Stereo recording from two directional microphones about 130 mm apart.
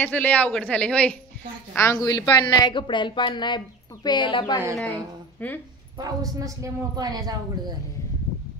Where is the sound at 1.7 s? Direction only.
25° left (ahead or behind).